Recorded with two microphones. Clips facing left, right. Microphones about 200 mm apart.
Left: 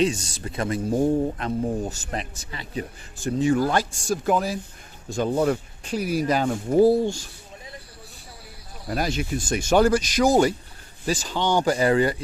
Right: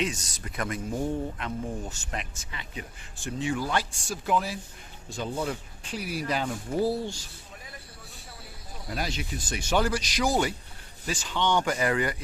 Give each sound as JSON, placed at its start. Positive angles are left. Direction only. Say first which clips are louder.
{"t": 0.0, "sound": "speech", "louder": "left 8 dB", "side_deg": 30}
{"t": 9.0, "sound": "speech", "louder": "left 8 dB", "side_deg": 50}